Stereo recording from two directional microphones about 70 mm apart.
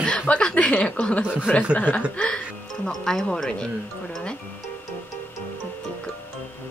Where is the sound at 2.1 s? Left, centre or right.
Centre.